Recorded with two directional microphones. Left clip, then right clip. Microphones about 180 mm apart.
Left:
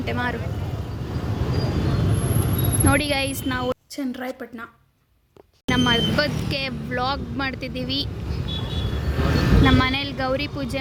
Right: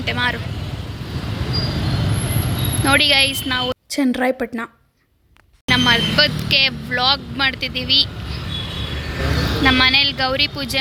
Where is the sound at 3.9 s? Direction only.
50° right (ahead or behind).